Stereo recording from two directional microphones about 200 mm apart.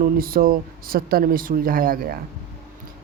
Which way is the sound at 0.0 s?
45° right (ahead or behind).